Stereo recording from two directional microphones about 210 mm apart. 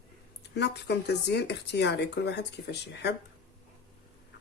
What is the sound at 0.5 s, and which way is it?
Speech, 55° left (ahead or behind).